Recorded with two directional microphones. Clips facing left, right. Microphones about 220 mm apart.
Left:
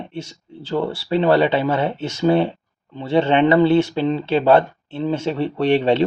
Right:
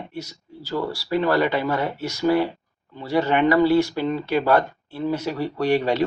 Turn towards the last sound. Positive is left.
turn(degrees=30)  # may be behind; listen again after turning